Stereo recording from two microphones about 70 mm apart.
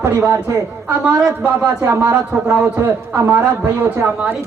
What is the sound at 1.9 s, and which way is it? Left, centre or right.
A man's voice, right.